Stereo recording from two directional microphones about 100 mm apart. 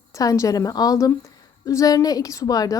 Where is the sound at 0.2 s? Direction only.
35° left (ahead or behind).